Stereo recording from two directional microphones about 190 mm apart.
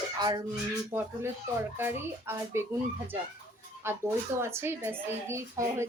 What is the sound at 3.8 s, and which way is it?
Speech, 15° right (ahead or behind).